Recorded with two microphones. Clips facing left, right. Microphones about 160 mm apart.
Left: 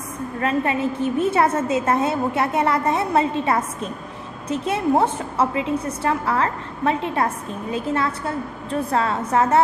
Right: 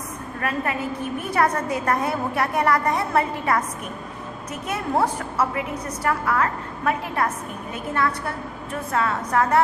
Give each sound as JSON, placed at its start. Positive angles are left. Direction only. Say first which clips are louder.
{"t": 0.3, "sound": "a woman's voice", "louder": "left 5 dB", "side_deg": 25}